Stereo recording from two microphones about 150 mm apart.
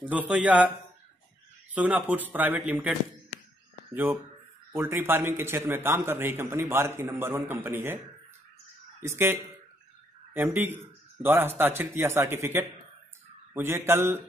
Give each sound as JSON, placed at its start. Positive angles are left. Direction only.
{"t": 0.0, "sound": "a man's voice", "side_deg": -10}
{"t": 1.7, "sound": "a man's voice", "side_deg": -10}
{"t": 3.9, "sound": "a man's voice", "side_deg": -15}
{"t": 9.0, "sound": "a man's voice", "side_deg": -15}